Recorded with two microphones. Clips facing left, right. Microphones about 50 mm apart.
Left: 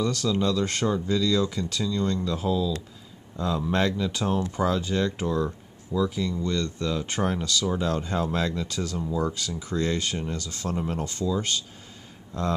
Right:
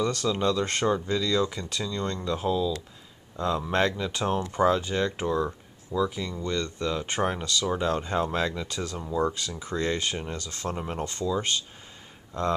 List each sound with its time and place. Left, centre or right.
0.0 s speech: centre